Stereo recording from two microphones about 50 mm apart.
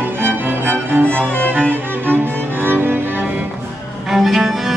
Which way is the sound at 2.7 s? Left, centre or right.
Right.